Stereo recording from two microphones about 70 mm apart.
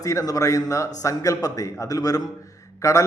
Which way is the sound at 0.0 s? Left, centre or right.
Left.